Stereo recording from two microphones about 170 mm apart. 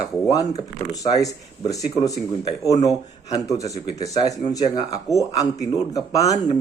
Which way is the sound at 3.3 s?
20° left (ahead or behind).